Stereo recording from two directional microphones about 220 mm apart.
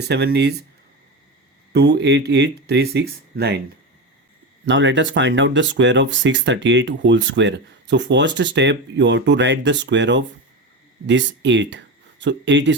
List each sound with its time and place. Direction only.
0.1 s speech: 50° right (ahead or behind)
1.7 s speech: 50° right (ahead or behind)
4.6 s speech: 55° right (ahead or behind)